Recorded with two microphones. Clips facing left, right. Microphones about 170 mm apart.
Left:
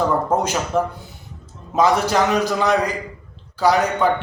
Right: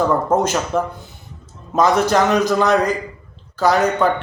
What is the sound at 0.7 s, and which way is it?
Speech, 10° left (ahead or behind).